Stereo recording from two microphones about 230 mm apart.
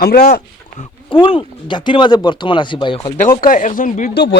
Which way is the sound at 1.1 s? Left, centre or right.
Left.